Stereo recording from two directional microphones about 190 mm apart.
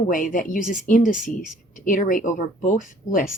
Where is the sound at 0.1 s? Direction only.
45° left (ahead or behind).